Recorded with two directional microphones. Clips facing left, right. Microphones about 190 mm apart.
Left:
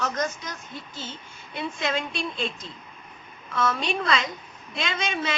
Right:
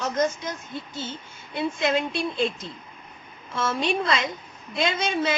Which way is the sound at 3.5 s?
25° right (ahead or behind).